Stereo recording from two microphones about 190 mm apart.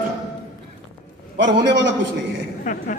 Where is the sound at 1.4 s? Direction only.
65° right (ahead or behind).